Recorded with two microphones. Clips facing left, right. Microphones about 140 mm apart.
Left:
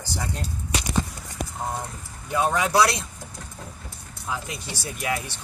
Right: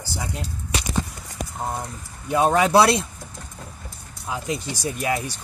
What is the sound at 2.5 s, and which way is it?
Speech, 65° right (ahead or behind).